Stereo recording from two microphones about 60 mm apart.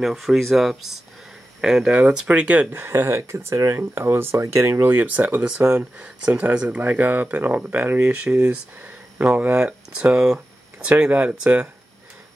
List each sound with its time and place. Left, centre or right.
0.0 s speech: centre
2.7 s speech: right
5.7 s speech: centre
6.8 s speech: right
8.1 s speech: right
9.9 s speech: centre
10.9 s speech: right